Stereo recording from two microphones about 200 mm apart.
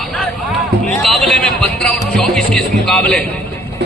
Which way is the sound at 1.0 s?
Centre (ahead or behind).